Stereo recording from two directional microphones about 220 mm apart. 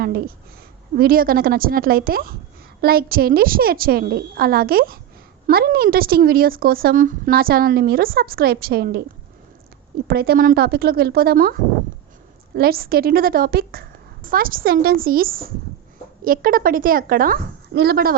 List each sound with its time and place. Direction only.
0.0 s a woman's voice: 45° right (ahead or behind)
10.1 s a woman's voice: 45° right (ahead or behind)